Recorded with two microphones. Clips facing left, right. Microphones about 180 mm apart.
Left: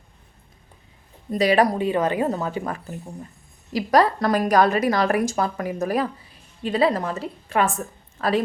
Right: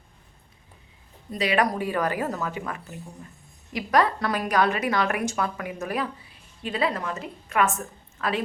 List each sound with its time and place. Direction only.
1.3 s a woman's voice: 40° left (ahead or behind)